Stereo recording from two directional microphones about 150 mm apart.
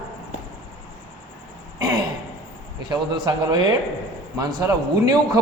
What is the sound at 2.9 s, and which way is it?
A man's voice, 30° right (ahead or behind).